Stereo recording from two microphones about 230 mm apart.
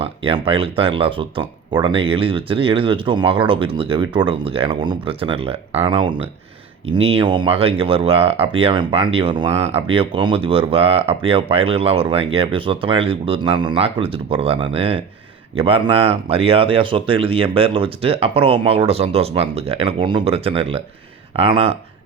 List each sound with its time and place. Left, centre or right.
0.0 s speech: right